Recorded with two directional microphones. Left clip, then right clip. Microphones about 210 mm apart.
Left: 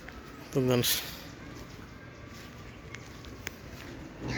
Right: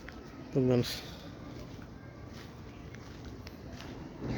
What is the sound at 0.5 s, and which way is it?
Speech, 5° right (ahead or behind).